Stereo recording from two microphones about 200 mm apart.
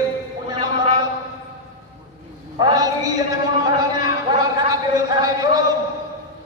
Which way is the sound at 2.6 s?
20° right (ahead or behind).